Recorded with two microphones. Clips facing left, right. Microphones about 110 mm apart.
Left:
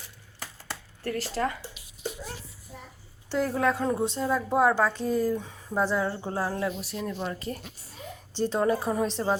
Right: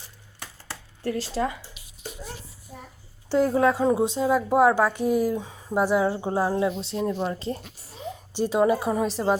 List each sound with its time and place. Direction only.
1.0 s a woman's voice: 20° right (ahead or behind)
3.2 s a woman's voice: 15° right (ahead or behind)
8.3 s a woman's voice: 10° right (ahead or behind)